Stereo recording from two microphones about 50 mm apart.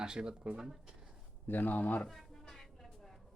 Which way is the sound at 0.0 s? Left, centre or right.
Centre.